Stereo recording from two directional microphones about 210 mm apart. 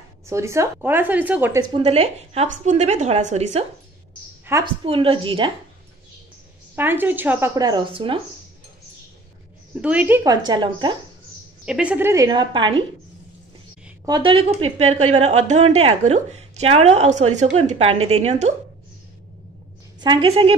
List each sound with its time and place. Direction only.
0.3 s speech: 15° right (ahead or behind)
1.7 s a woman's voice: 30° right (ahead or behind)
4.5 s a woman's voice: 10° right (ahead or behind)
4.8 s a woman's voice: 25° right (ahead or behind)
6.7 s speech: 10° right (ahead or behind); by 8.2 s 25° right (ahead or behind)
9.8 s speech: 5° right (ahead or behind); by 11.0 s 20° right (ahead or behind)
11.6 s speech: 5° right (ahead or behind); by 12.8 s 20° right (ahead or behind)
14.0 s a woman's voice: 20° right (ahead or behind)
20.0 s a woman's voice: 20° right (ahead or behind)